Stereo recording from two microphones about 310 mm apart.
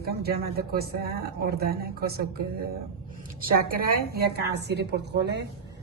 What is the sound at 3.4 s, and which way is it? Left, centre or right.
A woman's voice, right.